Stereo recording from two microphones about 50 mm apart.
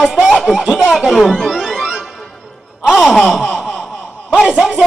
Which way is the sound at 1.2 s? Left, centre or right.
Centre.